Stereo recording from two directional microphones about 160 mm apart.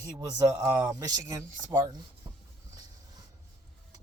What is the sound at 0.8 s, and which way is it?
Speech, 25° right (ahead or behind).